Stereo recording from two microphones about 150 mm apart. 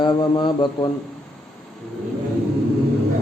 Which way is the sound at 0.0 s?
30° left (ahead or behind).